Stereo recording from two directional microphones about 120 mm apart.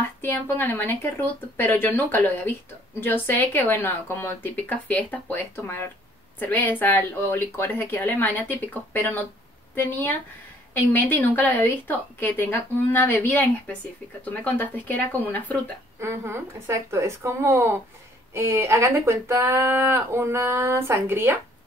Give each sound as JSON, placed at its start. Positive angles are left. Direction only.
{"t": 0.2, "sound": "a woman's voice", "side_deg": 15}
{"t": 16.0, "sound": "speech", "side_deg": -20}